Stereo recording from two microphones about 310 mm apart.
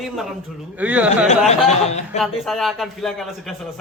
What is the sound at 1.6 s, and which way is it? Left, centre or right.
Speech, left.